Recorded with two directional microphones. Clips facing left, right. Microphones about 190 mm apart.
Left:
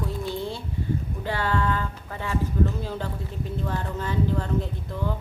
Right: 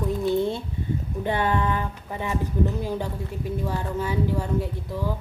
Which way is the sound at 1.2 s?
20° right (ahead or behind).